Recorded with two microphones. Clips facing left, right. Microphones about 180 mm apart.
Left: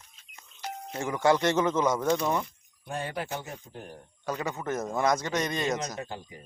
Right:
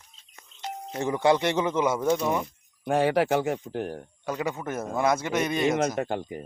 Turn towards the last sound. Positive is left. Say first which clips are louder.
# right 9 dB
turn(degrees=-60)  # may be behind; listen again after turning